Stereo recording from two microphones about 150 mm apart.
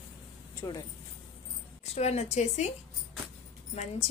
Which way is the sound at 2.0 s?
45° left (ahead or behind).